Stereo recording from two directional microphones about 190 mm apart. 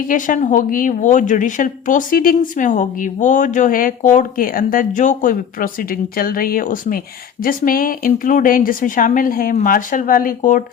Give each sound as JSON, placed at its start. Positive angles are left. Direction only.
{"t": 0.1, "sound": "a woman's voice", "side_deg": 40}